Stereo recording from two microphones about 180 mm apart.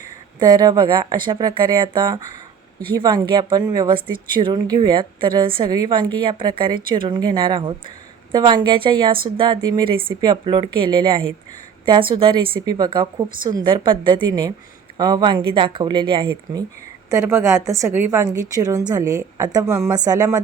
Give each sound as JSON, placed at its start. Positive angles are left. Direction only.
{"t": 0.3, "sound": "a woman's voice", "side_deg": -20}
{"t": 17.1, "sound": "a woman's voice", "side_deg": -15}